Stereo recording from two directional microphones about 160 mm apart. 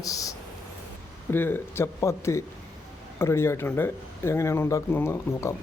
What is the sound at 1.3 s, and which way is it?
Speech, 15° left (ahead or behind).